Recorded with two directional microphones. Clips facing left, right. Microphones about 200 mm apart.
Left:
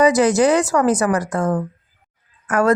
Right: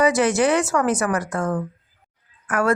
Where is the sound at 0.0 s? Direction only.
40° left (ahead or behind).